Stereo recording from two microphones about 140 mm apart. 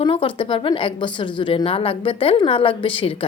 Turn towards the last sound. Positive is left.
turn(degrees=40)  # may be behind; listen again after turning